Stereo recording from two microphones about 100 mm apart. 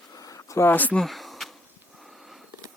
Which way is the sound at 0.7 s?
15° left (ahead or behind).